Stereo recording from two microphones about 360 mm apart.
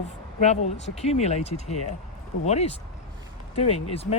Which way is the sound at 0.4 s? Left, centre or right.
Centre.